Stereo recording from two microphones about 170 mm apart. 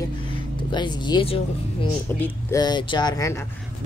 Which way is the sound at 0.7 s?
25° left (ahead or behind).